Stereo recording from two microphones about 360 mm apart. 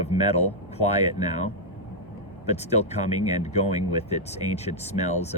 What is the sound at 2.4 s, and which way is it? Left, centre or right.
Speech, centre.